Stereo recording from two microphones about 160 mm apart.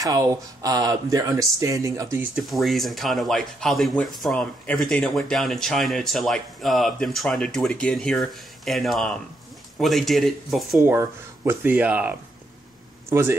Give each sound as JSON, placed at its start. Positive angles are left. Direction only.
{"t": 0.0, "sound": "speech", "side_deg": -20}
{"t": 2.3, "sound": "speech", "side_deg": 0}
{"t": 10.9, "sound": "speech", "side_deg": -15}